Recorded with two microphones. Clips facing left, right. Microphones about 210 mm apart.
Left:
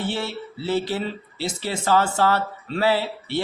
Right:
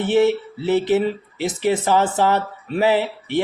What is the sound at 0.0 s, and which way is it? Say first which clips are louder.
Speech: right 11 dB; 20° right (ahead or behind).